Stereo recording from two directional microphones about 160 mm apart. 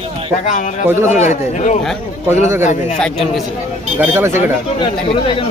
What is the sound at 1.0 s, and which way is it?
Speech, 45° left (ahead or behind).